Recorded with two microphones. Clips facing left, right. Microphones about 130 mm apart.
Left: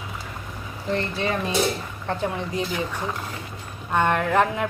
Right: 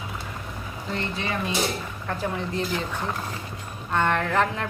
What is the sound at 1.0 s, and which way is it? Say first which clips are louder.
A woman's voice: left 2 dB; 30° left (ahead or behind).